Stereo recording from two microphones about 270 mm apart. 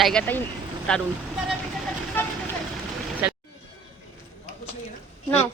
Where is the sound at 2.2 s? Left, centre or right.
Centre.